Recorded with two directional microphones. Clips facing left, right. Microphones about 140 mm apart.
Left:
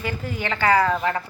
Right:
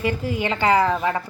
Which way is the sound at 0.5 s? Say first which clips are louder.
Even; 20° right (ahead or behind).